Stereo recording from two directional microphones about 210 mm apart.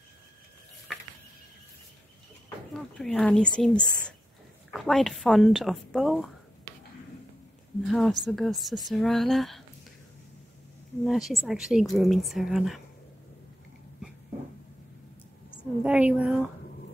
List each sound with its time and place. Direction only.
2.7 s speech: centre (ahead or behind)
7.9 s speech: centre (ahead or behind)
11.1 s speech: centre (ahead or behind)
15.5 s a woman's voice: 5° right (ahead or behind)